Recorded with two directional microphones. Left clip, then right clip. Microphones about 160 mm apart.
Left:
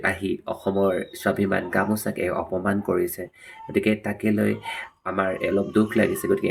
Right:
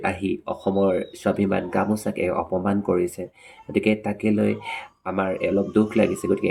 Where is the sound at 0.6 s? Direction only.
20° right (ahead or behind).